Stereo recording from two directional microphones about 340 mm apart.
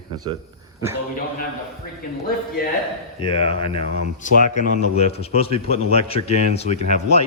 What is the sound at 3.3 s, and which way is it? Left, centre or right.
A man's voice, centre.